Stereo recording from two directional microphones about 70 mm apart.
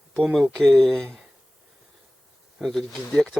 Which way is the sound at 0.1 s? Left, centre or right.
Centre.